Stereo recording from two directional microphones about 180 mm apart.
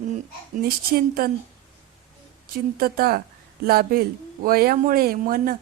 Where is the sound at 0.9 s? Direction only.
55° right (ahead or behind).